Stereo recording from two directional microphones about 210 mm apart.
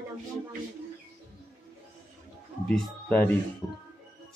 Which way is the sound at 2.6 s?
5° left (ahead or behind).